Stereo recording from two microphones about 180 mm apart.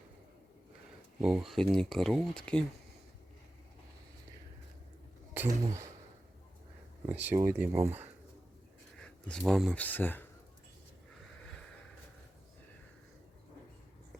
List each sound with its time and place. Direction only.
1.2 s speech: 5° right (ahead or behind)
5.3 s speech: 15° right (ahead or behind)
7.1 s speech: 10° right (ahead or behind)
9.0 s speech: 5° left (ahead or behind)